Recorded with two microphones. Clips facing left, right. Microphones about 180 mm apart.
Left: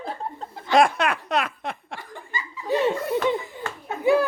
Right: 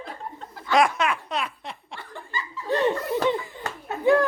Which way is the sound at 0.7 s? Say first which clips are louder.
Left 2 dB; 55° left (ahead or behind).